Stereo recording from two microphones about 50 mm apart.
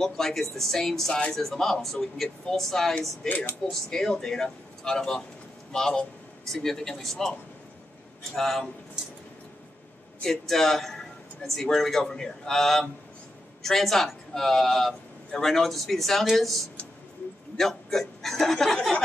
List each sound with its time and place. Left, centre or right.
0.0 s speech: centre
3.3 s speech: left
3.9 s speech: centre
8.4 s a man's voice: centre
10.2 s a man's voice: centre